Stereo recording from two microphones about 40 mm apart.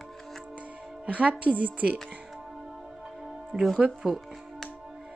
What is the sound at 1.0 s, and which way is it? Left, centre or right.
Speech, right.